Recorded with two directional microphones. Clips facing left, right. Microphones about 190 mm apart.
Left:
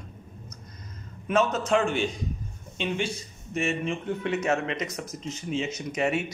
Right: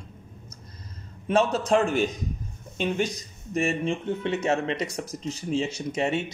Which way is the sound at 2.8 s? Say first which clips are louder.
Right 3 dB; 40° right (ahead or behind).